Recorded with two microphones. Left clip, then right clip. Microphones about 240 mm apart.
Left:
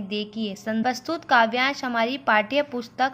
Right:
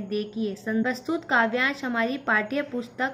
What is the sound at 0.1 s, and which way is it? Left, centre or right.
A woman's voice, left.